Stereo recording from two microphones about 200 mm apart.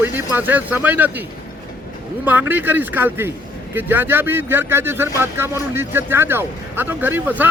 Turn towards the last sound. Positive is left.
turn(degrees=-10)  # may be behind; listen again after turning